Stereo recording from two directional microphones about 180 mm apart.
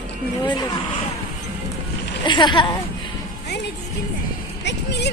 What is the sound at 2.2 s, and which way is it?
Speech, 25° left (ahead or behind).